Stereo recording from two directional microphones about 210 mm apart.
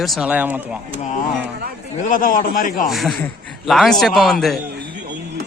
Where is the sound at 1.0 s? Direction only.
35° left (ahead or behind).